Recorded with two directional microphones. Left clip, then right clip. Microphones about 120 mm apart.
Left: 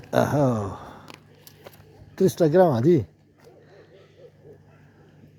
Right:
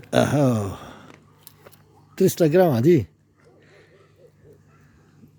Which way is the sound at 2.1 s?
80° right.